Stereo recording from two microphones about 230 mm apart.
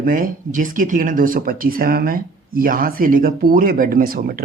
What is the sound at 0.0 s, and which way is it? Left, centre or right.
Speech, right.